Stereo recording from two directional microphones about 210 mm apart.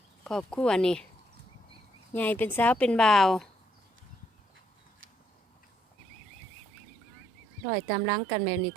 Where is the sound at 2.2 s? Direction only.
10° left (ahead or behind).